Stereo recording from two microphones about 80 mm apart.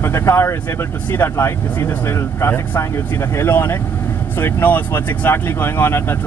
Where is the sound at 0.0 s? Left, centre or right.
Left.